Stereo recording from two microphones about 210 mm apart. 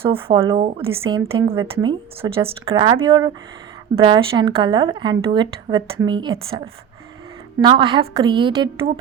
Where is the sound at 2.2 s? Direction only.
25° right (ahead or behind).